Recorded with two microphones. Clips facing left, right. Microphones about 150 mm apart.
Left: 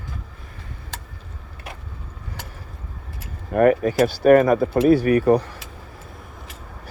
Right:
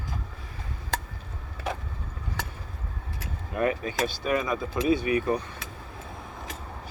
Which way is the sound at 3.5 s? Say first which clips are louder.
Left 11 dB; 60° left (ahead or behind).